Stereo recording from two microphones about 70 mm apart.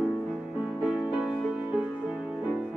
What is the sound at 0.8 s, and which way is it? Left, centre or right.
Music, centre.